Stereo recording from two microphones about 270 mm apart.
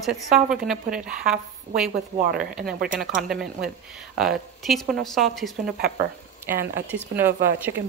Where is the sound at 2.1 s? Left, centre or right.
Right.